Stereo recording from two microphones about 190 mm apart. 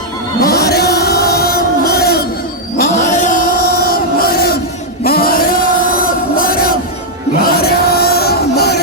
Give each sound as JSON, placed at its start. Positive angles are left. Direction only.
{"t": 0.4, "sound": "music", "side_deg": 55}
{"t": 2.7, "sound": "chant", "side_deg": 40}
{"t": 7.4, "sound": "music", "side_deg": 55}